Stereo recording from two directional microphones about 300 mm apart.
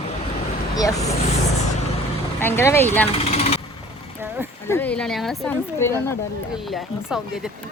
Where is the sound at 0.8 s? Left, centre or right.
Centre.